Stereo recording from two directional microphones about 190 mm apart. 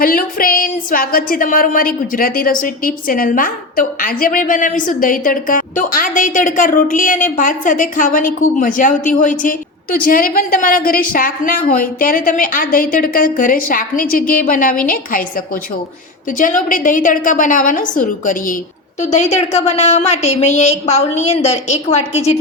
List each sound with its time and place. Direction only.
0.0 s a woman's voice: 50° left (ahead or behind)